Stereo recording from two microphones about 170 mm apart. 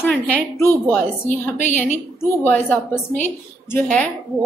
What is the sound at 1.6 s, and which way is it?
Speech, 45° left (ahead or behind).